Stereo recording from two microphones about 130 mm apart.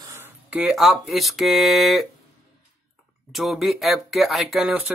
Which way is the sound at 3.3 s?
Centre (ahead or behind).